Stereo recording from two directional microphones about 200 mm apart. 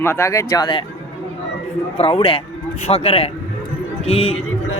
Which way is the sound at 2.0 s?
25° left (ahead or behind).